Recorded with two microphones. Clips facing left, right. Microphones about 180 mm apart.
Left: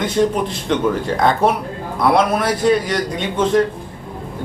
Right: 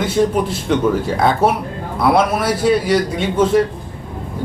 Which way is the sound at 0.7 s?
5° right (ahead or behind).